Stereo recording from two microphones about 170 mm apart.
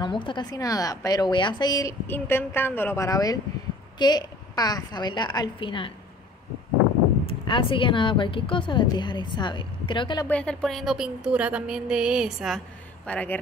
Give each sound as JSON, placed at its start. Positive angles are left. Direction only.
{"t": 0.0, "sound": "a woman's voice", "side_deg": 30}
{"t": 7.2, "sound": "a woman's voice", "side_deg": 30}
{"t": 10.2, "sound": "speech", "side_deg": 5}